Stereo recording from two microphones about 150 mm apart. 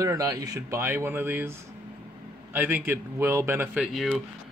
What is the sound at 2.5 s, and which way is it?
A man's voice, 10° right (ahead or behind).